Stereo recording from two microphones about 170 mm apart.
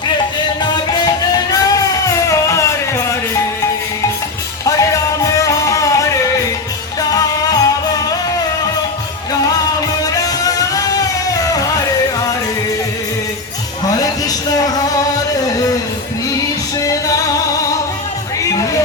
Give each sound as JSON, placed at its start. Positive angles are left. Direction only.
{"t": 0.6, "sound": "music", "side_deg": 25}
{"t": 4.6, "sound": "music", "side_deg": 20}
{"t": 7.1, "sound": "music", "side_deg": 20}
{"t": 10.0, "sound": "music", "side_deg": 20}
{"t": 14.0, "sound": "a sound", "side_deg": 20}
{"t": 16.8, "sound": "music", "side_deg": 20}
{"t": 18.4, "sound": "music", "side_deg": 20}